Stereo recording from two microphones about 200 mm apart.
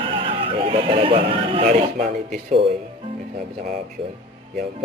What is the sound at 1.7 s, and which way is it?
Speech, 40° right (ahead or behind).